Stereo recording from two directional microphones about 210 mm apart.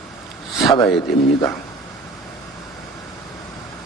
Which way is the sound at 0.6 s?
20° left (ahead or behind).